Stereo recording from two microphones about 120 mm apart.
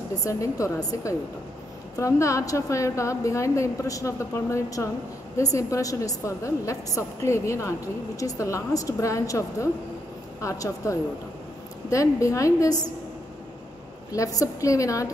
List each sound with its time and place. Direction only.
0.2 s a woman's voice: 25° left (ahead or behind)
14.1 s a woman's voice: 30° left (ahead or behind)